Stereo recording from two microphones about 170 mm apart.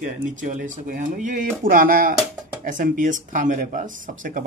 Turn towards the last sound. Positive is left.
turn(degrees=-50)  # may be behind; listen again after turning